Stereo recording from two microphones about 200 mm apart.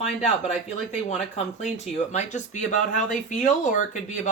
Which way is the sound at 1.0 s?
35° left (ahead or behind).